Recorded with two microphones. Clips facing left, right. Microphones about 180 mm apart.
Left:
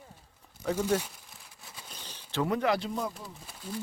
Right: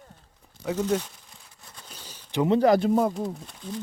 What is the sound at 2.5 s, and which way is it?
Speech, 40° right (ahead or behind).